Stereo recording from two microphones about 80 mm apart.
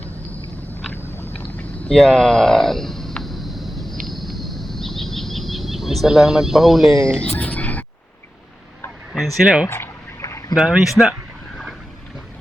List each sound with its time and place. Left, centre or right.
0.0 s vehicle: centre
1.9 s a sound: centre
6.9 s speech: right
7.2 s fowl: centre
9.1 s speech: centre
9.6 s a sound: left
10.5 s speech: centre